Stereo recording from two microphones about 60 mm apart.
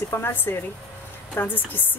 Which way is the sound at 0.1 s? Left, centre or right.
Left.